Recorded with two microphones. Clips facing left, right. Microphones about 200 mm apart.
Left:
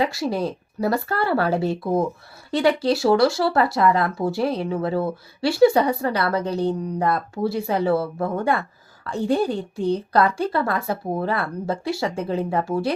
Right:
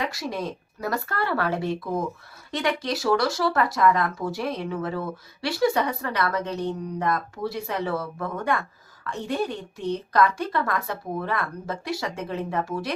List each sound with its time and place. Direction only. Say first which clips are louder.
0.0 s speech: left 6 dB; 30° left (ahead or behind)